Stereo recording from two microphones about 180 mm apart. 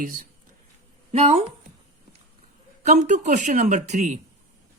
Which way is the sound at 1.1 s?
35° right (ahead or behind).